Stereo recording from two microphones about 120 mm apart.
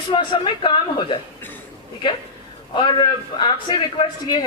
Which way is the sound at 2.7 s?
40° left (ahead or behind).